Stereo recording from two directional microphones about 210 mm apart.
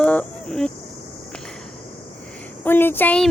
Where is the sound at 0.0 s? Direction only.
5° left (ahead or behind).